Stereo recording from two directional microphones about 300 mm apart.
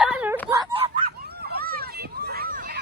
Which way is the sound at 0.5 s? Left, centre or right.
Centre.